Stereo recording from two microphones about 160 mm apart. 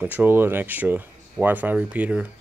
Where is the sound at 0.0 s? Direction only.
10° right (ahead or behind).